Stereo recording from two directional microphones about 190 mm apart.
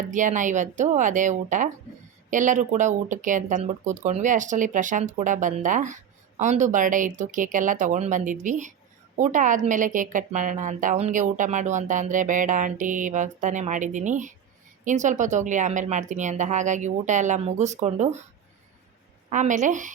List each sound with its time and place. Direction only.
0.1 s a woman's voice: 40° right (ahead or behind)
19.3 s a woman's voice: 40° right (ahead or behind)